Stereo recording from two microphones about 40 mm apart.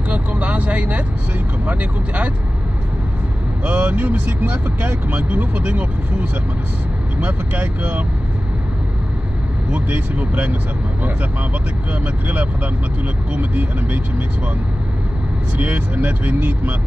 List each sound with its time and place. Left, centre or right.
0.1 s vehicle: right
1.7 s speech: right
3.6 s speech: right
7.2 s speech: right
9.8 s speech: right
11.9 s speech: right
15.6 s speech: right